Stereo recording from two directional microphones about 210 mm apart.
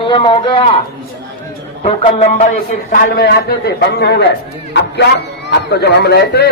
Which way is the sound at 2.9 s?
45° left (ahead or behind).